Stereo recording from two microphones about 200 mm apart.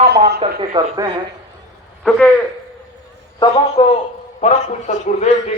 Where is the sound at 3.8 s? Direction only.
30° left (ahead or behind).